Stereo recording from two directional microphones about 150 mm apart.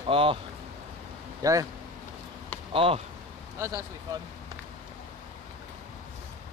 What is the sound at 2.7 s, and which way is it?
Speech, 35° right (ahead or behind).